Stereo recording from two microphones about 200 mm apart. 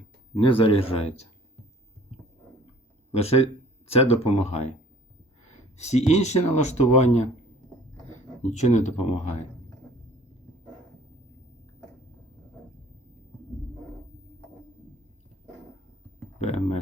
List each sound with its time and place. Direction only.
0.3 s speech: 30° left (ahead or behind)
3.2 s speech: 30° left (ahead or behind)
5.7 s speech: 35° left (ahead or behind)
8.4 s speech: 35° left (ahead or behind)
16.4 s speech: 30° left (ahead or behind)